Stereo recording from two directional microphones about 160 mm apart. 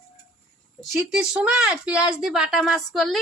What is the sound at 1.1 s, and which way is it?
A woman's voice, 5° right (ahead or behind).